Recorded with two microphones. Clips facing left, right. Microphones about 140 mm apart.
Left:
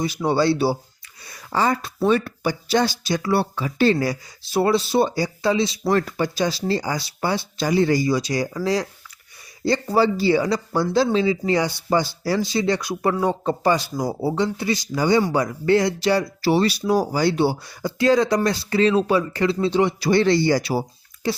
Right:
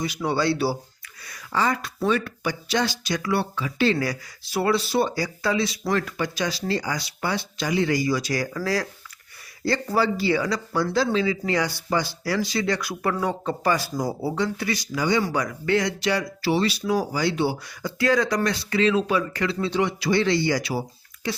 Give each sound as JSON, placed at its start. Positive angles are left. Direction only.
{"t": 0.0, "sound": "speech", "side_deg": 30}
{"t": 3.9, "sound": "speech", "side_deg": 25}